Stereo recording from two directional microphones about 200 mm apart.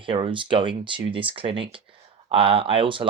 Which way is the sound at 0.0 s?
25° right (ahead or behind).